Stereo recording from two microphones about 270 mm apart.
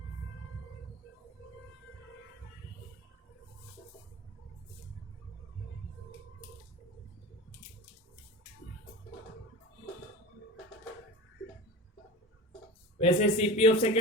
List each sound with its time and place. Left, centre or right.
13.0 s a man's voice: left